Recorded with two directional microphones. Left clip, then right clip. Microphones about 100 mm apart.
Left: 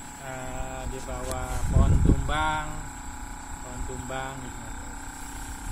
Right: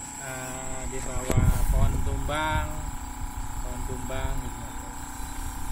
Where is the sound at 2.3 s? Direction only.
20° right (ahead or behind).